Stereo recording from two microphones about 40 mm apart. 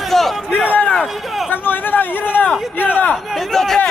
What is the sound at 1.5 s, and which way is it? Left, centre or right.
Speech, left.